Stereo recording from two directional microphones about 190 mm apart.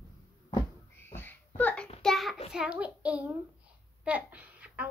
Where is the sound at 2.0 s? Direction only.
Centre (ahead or behind).